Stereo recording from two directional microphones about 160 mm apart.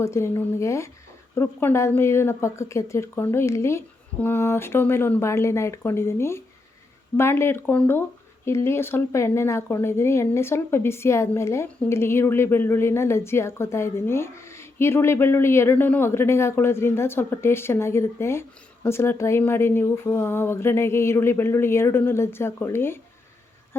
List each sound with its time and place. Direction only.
0.0 s speech: 15° left (ahead or behind)